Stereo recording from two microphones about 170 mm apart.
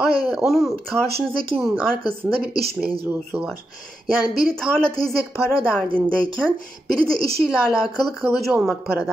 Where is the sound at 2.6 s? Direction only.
65° right (ahead or behind).